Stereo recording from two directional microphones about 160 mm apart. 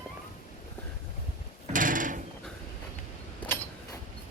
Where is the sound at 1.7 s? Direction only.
55° right (ahead or behind).